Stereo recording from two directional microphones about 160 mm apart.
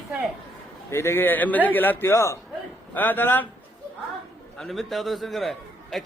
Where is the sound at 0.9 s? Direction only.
15° left (ahead or behind).